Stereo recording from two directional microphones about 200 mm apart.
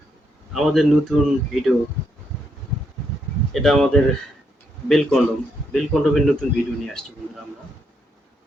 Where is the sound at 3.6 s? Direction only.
Centre (ahead or behind).